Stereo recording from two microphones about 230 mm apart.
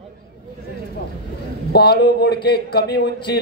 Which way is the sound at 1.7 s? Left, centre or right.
Left.